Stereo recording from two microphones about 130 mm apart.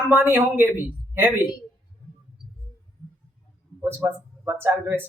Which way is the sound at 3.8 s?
15° right (ahead or behind).